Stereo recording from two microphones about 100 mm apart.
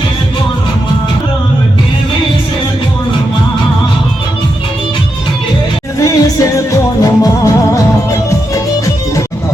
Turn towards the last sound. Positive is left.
turn(degrees=35)  # may be behind; listen again after turning